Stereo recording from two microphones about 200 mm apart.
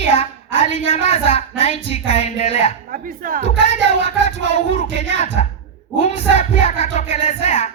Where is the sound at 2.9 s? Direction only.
45° right (ahead or behind).